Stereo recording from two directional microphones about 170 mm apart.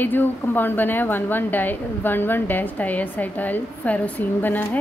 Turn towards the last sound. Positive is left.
turn(degrees=10)  # may be behind; listen again after turning